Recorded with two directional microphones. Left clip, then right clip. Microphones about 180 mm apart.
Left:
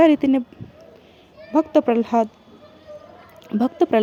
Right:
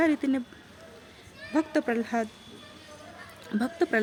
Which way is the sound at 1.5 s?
35° left (ahead or behind).